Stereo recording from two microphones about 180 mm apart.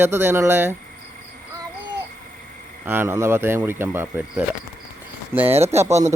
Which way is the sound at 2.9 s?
15° right (ahead or behind).